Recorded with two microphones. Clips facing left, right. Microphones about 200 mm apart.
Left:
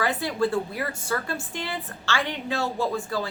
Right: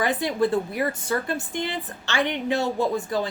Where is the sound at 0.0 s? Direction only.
20° right (ahead or behind).